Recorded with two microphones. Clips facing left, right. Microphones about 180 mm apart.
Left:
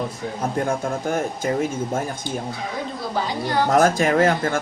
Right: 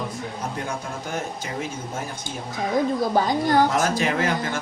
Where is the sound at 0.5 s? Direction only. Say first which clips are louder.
Left 7 dB; 50° left (ahead or behind).